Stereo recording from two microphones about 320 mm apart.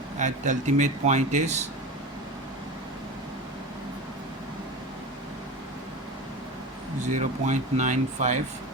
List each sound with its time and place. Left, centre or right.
0.2 s speech: right
7.1 s speech: right